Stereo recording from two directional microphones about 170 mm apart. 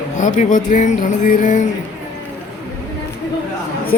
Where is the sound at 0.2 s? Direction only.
45° left (ahead or behind).